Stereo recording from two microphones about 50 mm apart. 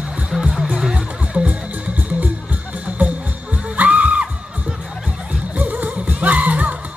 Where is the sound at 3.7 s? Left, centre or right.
Right.